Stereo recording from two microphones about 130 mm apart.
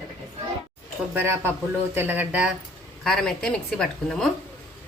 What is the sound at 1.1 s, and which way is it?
Speech, 20° right (ahead or behind).